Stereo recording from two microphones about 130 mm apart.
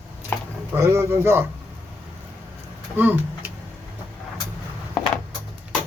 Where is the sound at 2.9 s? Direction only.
15° right (ahead or behind).